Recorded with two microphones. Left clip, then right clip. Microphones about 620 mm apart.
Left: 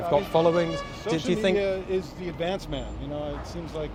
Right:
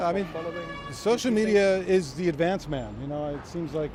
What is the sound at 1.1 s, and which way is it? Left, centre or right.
Speech, right.